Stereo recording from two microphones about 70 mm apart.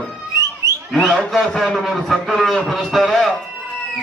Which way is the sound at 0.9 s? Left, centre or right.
Centre.